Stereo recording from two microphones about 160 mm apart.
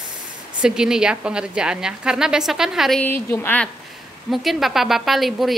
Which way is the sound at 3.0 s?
10° left (ahead or behind).